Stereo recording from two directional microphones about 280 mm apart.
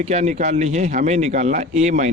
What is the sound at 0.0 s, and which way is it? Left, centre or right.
Speech, right.